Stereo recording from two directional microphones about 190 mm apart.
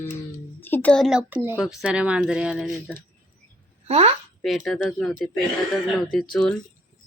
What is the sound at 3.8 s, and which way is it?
Speech, 35° right (ahead or behind).